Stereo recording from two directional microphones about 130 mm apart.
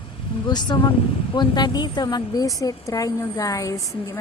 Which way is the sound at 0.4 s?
35° left (ahead or behind).